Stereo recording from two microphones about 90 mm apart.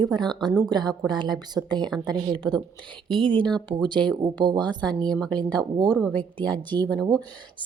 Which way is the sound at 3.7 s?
60° right (ahead or behind).